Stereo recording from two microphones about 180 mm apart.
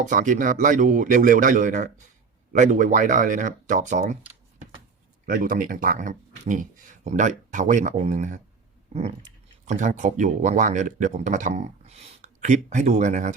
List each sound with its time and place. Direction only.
0.0 s speech: 45° right (ahead or behind)
5.2 s speech: 50° right (ahead or behind)
8.9 s dog: 35° right (ahead or behind)
9.6 s speech: 45° right (ahead or behind)